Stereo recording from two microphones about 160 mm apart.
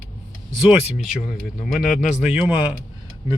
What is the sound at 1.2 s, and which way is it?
Speech, centre (ahead or behind).